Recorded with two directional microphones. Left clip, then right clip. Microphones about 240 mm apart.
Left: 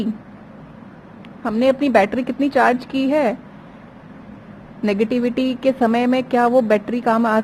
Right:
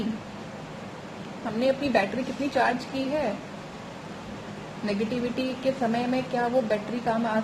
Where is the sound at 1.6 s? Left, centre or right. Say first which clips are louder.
Left 9 dB; left.